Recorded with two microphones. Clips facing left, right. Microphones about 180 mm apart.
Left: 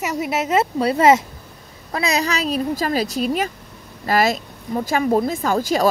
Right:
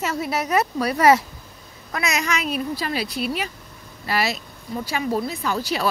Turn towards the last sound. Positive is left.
turn(degrees=45)  # may be behind; listen again after turning